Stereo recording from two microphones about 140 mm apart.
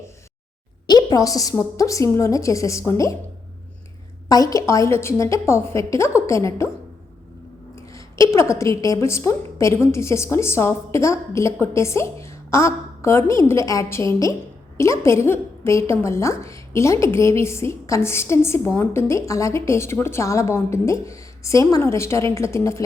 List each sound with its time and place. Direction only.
0.9 s a woman's voice: 30° left (ahead or behind)
4.3 s a woman's voice: 25° left (ahead or behind)
7.9 s a woman's voice: 20° left (ahead or behind)